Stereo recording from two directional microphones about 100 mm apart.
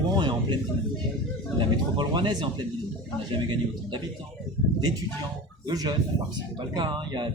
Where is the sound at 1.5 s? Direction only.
50° right (ahead or behind).